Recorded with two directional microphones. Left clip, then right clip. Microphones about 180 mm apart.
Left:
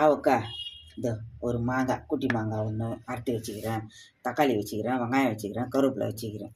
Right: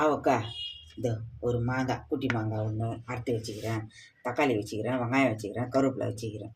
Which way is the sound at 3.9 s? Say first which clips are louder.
Left 2 dB; 45° left (ahead or behind).